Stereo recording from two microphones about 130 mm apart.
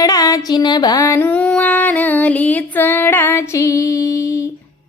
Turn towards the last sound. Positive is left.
turn(degrees=25)  # may be behind; listen again after turning